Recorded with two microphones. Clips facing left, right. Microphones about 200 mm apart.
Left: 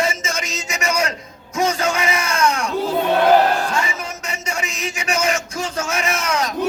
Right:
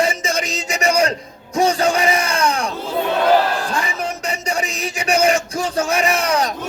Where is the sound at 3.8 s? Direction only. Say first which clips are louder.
Right 2 dB; 35° right (ahead or behind).